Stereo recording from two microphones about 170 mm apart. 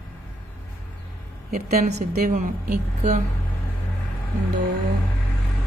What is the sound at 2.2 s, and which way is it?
Speech, 50° right (ahead or behind).